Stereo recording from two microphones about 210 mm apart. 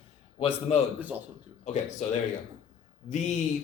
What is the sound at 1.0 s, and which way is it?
Speech, 10° right (ahead or behind).